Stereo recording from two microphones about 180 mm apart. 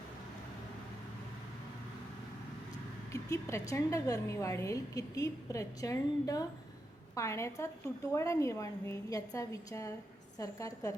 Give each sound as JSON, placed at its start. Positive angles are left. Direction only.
{"t": 3.1, "sound": "a woman's voice", "side_deg": 15}